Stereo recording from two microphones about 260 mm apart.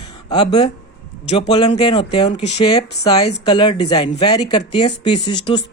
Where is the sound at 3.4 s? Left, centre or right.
Centre.